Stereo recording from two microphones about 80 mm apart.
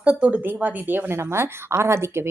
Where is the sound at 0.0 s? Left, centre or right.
Centre.